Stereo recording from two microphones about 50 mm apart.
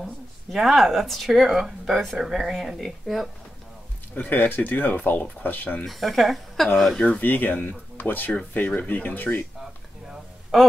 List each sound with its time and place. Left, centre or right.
0.0 s speech: centre
4.1 s speech: left
5.9 s speech: centre
7.2 s speech: left